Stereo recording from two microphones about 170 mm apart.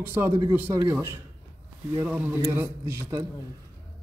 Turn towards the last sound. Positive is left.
turn(degrees=-15)  # may be behind; listen again after turning